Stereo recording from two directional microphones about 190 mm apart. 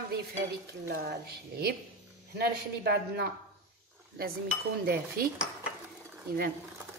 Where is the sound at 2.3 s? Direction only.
60° right (ahead or behind).